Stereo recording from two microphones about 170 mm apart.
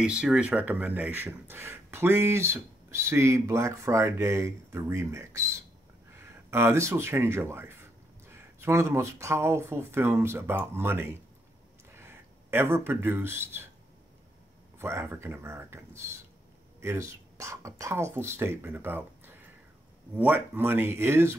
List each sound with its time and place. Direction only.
0.0 s speech: 5° right (ahead or behind)
14.8 s speech: 15° right (ahead or behind)